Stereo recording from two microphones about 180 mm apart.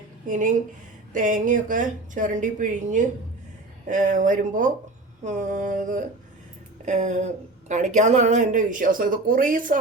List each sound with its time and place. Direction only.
0.3 s speech: 45° right (ahead or behind)